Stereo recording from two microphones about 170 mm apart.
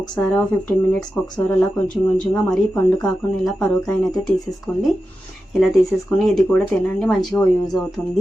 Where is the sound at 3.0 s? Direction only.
5° left (ahead or behind).